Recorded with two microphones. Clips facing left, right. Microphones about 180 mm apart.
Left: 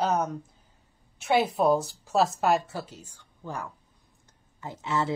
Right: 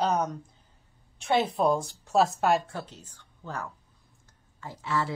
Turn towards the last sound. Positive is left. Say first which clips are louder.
# left 2 dB
turn(degrees=20)  # may be behind; listen again after turning